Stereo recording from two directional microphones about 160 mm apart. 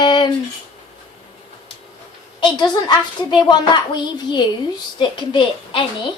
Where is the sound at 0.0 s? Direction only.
30° left (ahead or behind).